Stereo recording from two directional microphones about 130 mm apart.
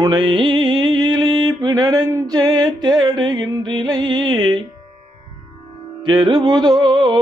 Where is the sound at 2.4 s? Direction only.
35° right (ahead or behind).